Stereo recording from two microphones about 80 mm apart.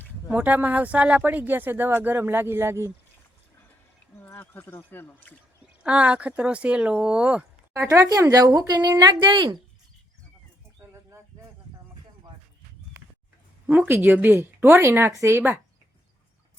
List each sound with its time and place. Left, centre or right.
0.3 s speech: centre
4.4 s speech: left
5.8 s speech: centre
7.7 s a woman's voice: right
13.7 s a woman's voice: right
14.7 s speech: right